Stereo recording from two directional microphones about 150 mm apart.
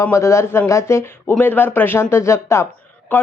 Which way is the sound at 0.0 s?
20° left (ahead or behind).